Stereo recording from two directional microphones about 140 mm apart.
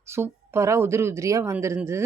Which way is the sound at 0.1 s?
20° right (ahead or behind).